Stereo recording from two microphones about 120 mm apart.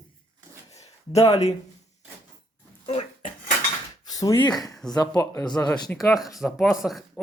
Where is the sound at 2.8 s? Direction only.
65° left (ahead or behind).